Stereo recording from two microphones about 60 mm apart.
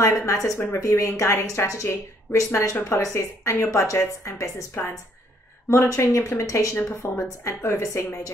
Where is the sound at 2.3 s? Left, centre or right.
Left.